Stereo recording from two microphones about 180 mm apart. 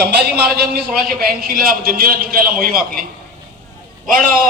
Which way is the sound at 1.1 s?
55° right (ahead or behind).